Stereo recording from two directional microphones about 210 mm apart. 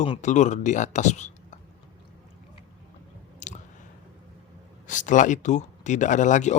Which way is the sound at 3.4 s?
35° left (ahead or behind).